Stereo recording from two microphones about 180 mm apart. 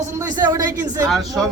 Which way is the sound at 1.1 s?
Centre (ahead or behind).